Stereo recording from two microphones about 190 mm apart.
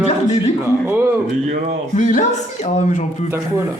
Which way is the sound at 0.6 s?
15° right (ahead or behind).